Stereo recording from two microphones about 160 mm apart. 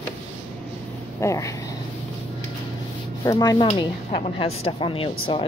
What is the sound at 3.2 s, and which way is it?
Rub, 20° left (ahead or behind).